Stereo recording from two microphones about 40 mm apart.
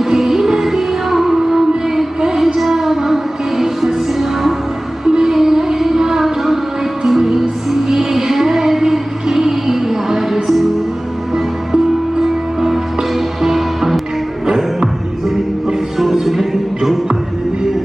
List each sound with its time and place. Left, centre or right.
0.0 s music: centre
5.0 s music: centre